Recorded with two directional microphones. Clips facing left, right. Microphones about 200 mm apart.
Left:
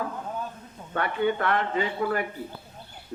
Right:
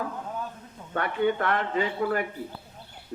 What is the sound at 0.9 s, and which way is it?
A man's voice, 45° right (ahead or behind).